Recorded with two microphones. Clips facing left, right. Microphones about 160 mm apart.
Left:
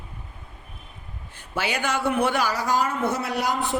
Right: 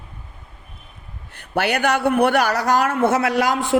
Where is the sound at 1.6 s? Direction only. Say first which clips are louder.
Right 7 dB; 65° right (ahead or behind); by 3.8 s 90° right.